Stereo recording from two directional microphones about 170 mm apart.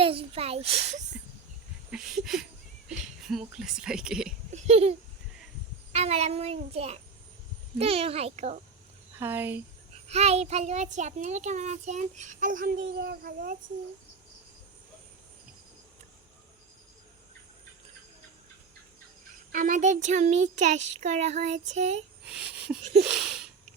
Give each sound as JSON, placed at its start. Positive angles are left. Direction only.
{"t": 0.0, "sound": "a child's voice", "side_deg": -30}
{"t": 1.9, "sound": "speech", "side_deg": 0}
{"t": 4.5, "sound": "a child's voice", "side_deg": -40}
{"t": 9.1, "sound": "speech", "side_deg": -15}
{"t": 10.1, "sound": "a child's voice", "side_deg": -40}
{"t": 19.5, "sound": "a child's voice", "side_deg": -50}
{"t": 22.3, "sound": "a sound", "side_deg": -5}